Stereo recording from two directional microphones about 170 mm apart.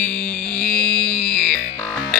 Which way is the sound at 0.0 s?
10° left (ahead or behind).